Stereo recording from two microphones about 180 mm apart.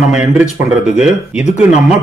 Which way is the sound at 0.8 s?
5° right (ahead or behind).